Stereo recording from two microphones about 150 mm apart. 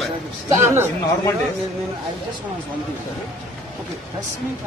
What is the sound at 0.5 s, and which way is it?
Speech, 15° right (ahead or behind).